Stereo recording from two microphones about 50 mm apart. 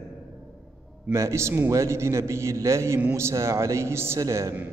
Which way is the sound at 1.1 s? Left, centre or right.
Right.